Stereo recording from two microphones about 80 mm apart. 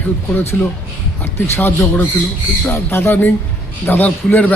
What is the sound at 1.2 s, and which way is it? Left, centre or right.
Speech, left.